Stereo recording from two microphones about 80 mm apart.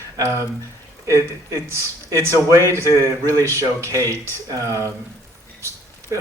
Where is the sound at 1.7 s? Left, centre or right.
Right.